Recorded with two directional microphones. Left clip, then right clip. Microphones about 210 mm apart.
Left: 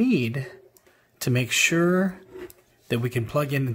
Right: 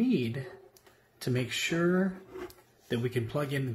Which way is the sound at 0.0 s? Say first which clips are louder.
Left 6 dB; 40° left (ahead or behind).